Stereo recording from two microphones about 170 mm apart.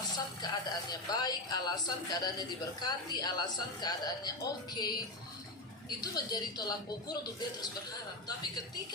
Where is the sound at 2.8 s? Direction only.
25° left (ahead or behind).